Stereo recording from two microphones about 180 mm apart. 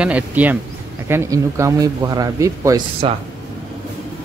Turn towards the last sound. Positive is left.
turn(degrees=-30)  # may be behind; listen again after turning